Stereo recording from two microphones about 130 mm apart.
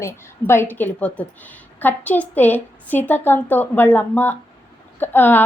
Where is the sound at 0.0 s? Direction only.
20° left (ahead or behind).